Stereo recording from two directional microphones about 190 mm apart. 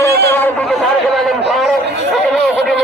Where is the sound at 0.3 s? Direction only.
10° left (ahead or behind).